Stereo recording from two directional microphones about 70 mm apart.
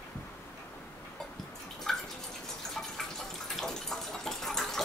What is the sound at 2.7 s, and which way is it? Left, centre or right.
Water, centre.